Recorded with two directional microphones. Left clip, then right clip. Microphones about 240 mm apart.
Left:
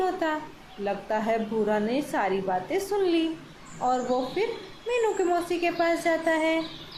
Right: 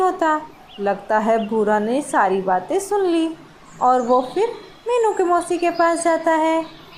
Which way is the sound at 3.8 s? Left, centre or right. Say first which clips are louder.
Right 10 dB; centre.